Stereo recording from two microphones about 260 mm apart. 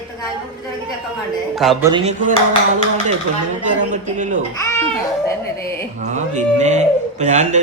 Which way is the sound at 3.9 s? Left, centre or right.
Right.